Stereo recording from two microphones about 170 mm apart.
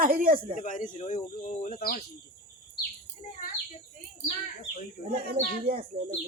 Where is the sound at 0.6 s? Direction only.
50° left (ahead or behind).